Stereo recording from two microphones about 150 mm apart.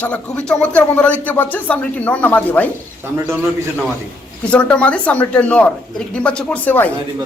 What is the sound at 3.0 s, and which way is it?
Speech, 15° right (ahead or behind).